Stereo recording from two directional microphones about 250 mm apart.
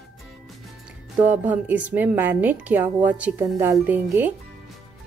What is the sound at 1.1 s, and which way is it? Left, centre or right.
Speech, centre.